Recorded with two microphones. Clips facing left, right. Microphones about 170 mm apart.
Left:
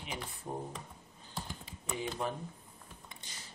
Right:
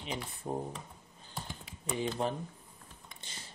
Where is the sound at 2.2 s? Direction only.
30° right (ahead or behind).